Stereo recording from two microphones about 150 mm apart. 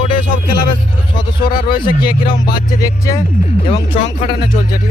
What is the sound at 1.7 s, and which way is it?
Speech, 30° left (ahead or behind).